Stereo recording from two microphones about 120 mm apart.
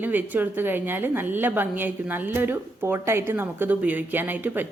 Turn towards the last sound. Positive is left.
turn(degrees=-15)  # may be behind; listen again after turning